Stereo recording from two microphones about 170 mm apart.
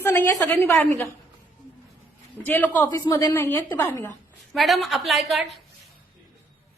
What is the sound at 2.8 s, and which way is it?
A woman's voice, 25° left (ahead or behind).